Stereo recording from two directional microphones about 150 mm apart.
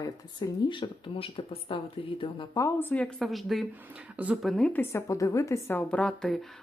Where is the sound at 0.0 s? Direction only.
25° left (ahead or behind).